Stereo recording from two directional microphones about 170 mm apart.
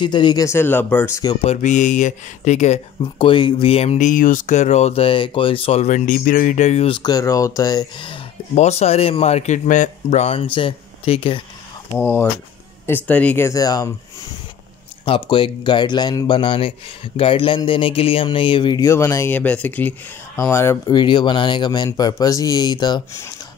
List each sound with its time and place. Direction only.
0.0 s speech: 25° left (ahead or behind)
1.4 s speech: 40° left (ahead or behind)
3.0 s speech: 30° left (ahead or behind)
7.0 s speech: 20° left (ahead or behind)
8.5 s speech: 40° left (ahead or behind)
11.9 s speech: 15° left (ahead or behind)
15.0 s speech: 30° left (ahead or behind)
21.0 s speech: 25° left (ahead or behind)